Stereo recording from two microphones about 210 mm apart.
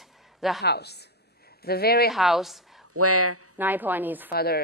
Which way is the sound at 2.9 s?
90° right.